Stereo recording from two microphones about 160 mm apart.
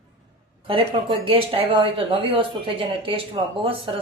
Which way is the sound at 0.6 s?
35° right (ahead or behind).